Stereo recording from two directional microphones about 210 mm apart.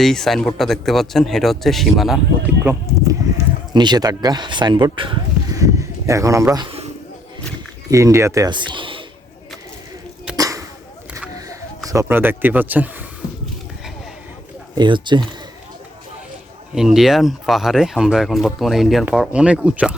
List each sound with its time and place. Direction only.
0.0 s speech: centre (ahead or behind)
2.6 s speech: 15° right (ahead or behind)
5.5 s a sound: 15° right (ahead or behind)
7.9 s speech: 15° right (ahead or behind)
10.3 s a sound: 15° right (ahead or behind)
11.3 s speech: 15° right (ahead or behind)
14.8 s speech: 20° right (ahead or behind)
16.7 s speech: centre (ahead or behind)